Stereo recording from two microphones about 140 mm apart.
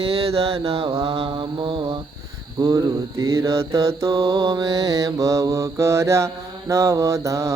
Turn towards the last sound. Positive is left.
turn(degrees=-20)  # may be behind; listen again after turning